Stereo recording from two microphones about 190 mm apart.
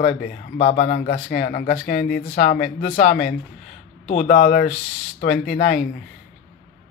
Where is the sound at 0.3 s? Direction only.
35° left (ahead or behind).